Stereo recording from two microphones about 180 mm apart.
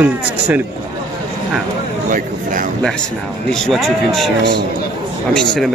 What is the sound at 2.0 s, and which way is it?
Speech, 50° right (ahead or behind).